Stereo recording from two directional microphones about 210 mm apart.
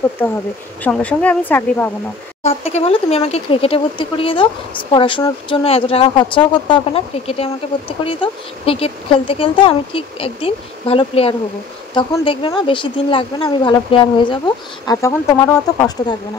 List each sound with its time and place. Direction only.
0.8 s speech: 5° left (ahead or behind)
2.4 s speech: 30° left (ahead or behind); by 16.2 s 15° left (ahead or behind)